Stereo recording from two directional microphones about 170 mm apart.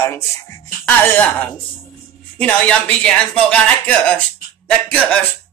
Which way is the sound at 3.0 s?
5° left (ahead or behind).